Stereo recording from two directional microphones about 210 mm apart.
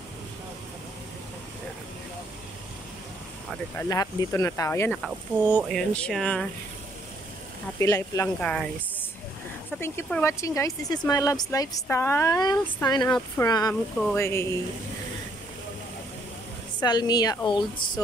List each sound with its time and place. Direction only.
3.7 s speech: 15° left (ahead or behind)
4.9 s speech: centre (ahead or behind)
7.8 s speech: 15° left (ahead or behind)
16.8 s a woman's voice: 20° left (ahead or behind)